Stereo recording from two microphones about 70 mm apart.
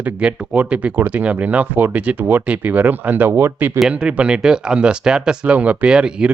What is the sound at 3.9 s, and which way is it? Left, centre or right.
Speech, centre.